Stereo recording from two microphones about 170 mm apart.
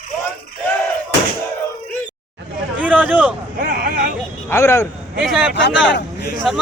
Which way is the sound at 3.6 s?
60° right (ahead or behind).